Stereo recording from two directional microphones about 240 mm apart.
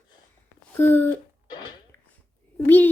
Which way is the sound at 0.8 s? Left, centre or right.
Centre.